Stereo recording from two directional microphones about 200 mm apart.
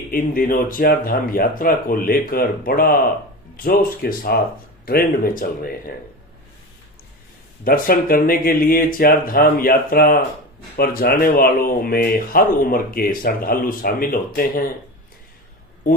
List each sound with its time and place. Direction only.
0.1 s speech: 45° left (ahead or behind)
7.6 s speech: 45° left (ahead or behind)